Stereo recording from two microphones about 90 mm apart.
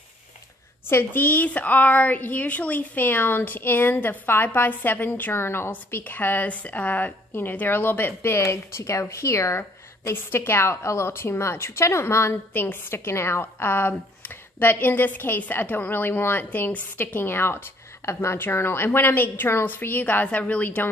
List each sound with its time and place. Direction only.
0.8 s a woman's voice: 25° left (ahead or behind)